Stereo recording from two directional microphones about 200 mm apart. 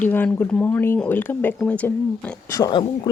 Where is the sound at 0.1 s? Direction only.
10° left (ahead or behind).